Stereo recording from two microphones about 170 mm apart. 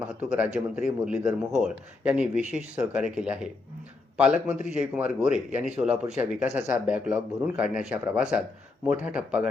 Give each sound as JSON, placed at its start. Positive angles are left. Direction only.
{"t": 0.0, "sound": "a man's voice", "side_deg": -5}
{"t": 2.4, "sound": "speech", "side_deg": -45}
{"t": 2.7, "sound": "a man's voice", "side_deg": -5}